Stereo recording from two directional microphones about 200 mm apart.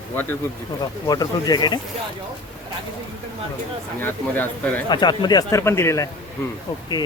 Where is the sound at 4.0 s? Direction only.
10° left (ahead or behind).